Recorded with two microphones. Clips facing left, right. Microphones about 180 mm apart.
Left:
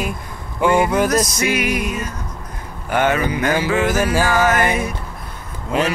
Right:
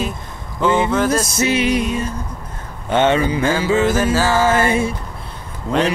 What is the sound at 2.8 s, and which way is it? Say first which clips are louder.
Speech: right 3 dB; 25° right (ahead or behind).